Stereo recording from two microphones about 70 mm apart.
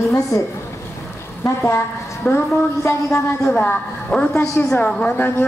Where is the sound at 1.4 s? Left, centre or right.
Left.